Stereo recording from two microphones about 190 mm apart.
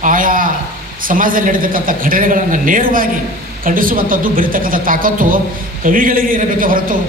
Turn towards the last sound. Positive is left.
turn(degrees=-45)  # may be behind; listen again after turning